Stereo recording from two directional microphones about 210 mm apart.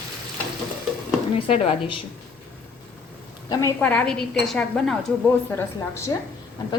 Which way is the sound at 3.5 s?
15° left (ahead or behind).